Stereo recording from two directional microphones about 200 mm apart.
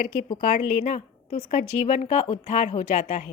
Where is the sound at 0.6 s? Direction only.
35° left (ahead or behind).